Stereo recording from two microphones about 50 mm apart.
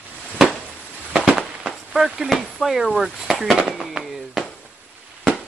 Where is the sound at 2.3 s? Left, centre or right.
Centre.